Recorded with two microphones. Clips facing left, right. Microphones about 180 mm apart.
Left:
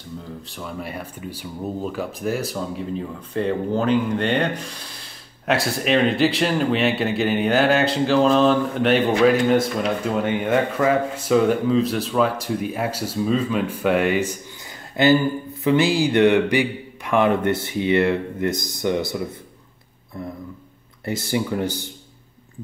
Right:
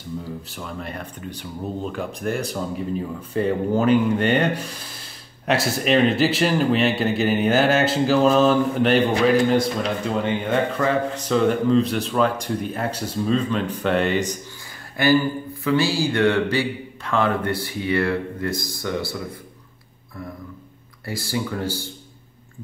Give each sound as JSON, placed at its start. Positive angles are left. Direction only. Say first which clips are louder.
{"t": 0.2, "sound": "speech", "louder": "right 1 dB", "side_deg": 0}
{"t": 15.0, "sound": "speech", "louder": "left 2 dB", "side_deg": 20}
{"t": 21.0, "sound": "speech", "louder": "left 3 dB", "side_deg": 20}